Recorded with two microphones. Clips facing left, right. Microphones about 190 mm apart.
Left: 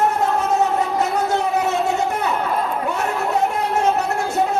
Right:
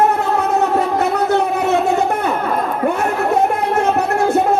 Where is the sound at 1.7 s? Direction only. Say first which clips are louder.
Right 5 dB; 55° right (ahead or behind).